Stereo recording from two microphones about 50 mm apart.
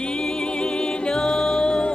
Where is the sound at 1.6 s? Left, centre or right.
Centre.